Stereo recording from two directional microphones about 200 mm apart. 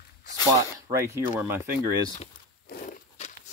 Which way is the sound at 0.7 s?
15° right (ahead or behind).